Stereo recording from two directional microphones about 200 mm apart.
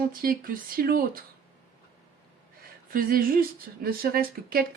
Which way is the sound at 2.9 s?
45° right (ahead or behind).